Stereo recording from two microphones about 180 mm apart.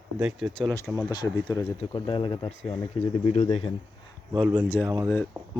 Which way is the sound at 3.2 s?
40° left (ahead or behind).